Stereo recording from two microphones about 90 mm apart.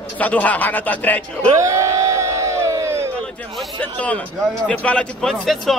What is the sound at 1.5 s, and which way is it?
Crowd, 35° right (ahead or behind).